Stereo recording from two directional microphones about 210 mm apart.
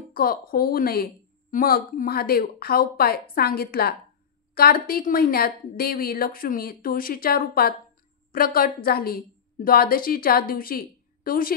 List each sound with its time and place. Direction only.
0.1 s a woman's voice: 45° left (ahead or behind)